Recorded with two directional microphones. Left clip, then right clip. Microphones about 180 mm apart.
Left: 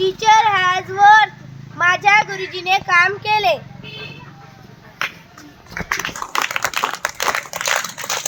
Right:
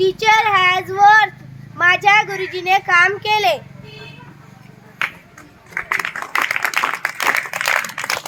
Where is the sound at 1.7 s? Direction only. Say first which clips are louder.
Right 1 dB; 25° right (ahead or behind).